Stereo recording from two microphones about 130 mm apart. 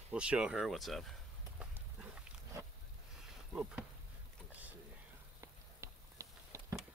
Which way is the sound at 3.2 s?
10° right (ahead or behind).